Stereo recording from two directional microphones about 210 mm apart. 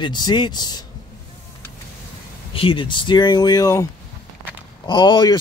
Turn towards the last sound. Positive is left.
turn(degrees=20)  # may be behind; listen again after turning